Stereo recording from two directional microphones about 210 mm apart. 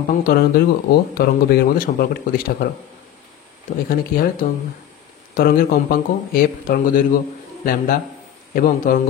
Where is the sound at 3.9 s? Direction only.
45° left (ahead or behind).